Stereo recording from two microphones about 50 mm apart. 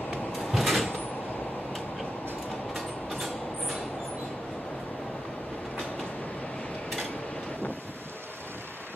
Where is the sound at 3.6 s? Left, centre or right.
Centre.